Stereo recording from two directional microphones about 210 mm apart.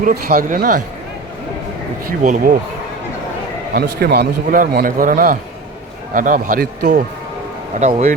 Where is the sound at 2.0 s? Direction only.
40° right (ahead or behind).